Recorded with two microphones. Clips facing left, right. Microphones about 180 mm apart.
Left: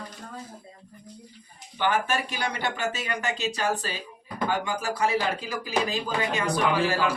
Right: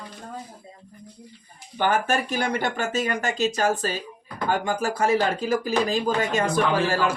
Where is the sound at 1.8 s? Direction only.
45° right (ahead or behind).